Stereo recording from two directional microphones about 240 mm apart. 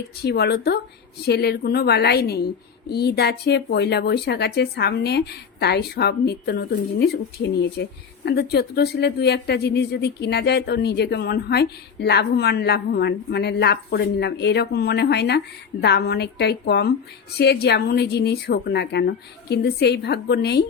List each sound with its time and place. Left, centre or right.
0.3 s a woman's voice: left